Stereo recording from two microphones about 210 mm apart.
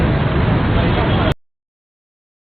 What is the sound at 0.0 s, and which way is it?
Vehicle, centre (ahead or behind).